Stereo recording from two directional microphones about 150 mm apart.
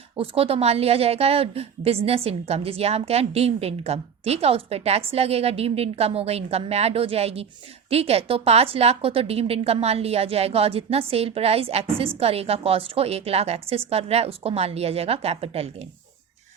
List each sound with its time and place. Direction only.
0.2 s a woman's voice: 40° right (ahead or behind)